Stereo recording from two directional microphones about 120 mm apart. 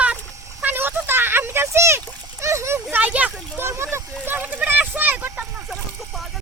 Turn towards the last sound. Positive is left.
turn(degrees=-15)  # may be behind; listen again after turning